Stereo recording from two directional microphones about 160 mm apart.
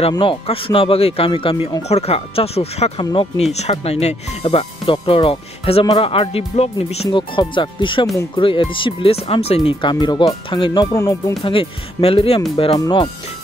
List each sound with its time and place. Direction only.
0.1 s speech: 30° left (ahead or behind)
7.1 s speech: 30° left (ahead or behind)
11.4 s speech: 35° left (ahead or behind)
12.7 s speech: 25° left (ahead or behind)